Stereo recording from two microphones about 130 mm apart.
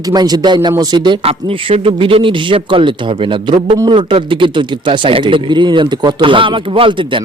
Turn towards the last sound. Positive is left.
turn(degrees=-40)  # may be behind; listen again after turning